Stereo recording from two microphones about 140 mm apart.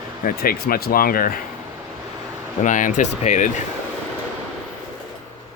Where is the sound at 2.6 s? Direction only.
65° left (ahead or behind).